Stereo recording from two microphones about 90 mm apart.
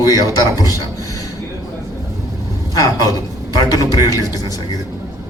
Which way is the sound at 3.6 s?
45° left (ahead or behind).